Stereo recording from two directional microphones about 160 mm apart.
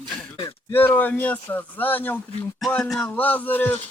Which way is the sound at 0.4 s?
15° left (ahead or behind).